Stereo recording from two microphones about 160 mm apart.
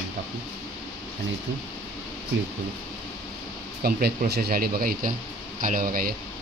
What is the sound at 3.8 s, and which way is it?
Speech, 70° right (ahead or behind).